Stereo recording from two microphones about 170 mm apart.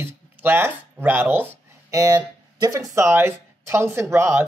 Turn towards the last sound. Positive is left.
turn(degrees=-15)  # may be behind; listen again after turning